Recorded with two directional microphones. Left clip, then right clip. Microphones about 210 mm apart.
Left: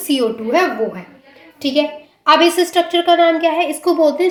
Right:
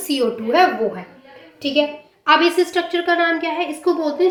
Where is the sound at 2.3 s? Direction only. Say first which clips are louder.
Left 3 dB; 45° left (ahead or behind).